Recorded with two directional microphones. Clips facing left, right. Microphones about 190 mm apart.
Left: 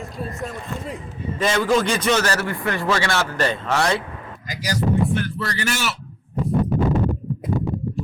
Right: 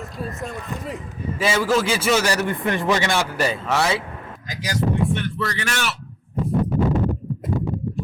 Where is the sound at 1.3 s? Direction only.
5° right (ahead or behind).